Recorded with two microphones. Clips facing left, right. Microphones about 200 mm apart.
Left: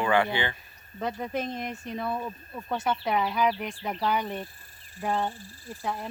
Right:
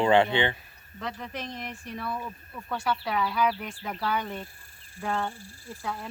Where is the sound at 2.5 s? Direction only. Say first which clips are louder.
Left 1 dB; 20° left (ahead or behind).